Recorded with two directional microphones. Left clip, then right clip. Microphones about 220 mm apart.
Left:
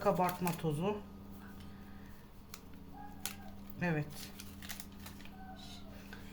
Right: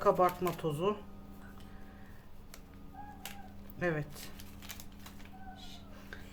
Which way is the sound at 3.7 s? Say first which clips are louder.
Right 3 dB; 20° right (ahead or behind).